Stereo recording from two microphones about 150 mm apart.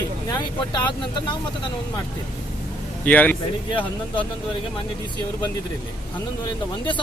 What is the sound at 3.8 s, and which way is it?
Speech, 30° left (ahead or behind).